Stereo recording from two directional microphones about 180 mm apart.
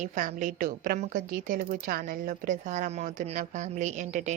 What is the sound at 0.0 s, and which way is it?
A woman's voice, 45° right (ahead or behind).